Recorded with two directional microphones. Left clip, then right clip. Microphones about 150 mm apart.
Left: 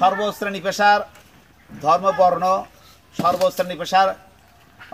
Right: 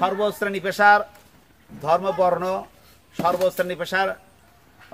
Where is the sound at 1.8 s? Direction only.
15° right (ahead or behind).